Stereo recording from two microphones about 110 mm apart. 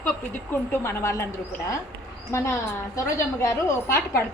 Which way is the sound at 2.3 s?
25° left (ahead or behind).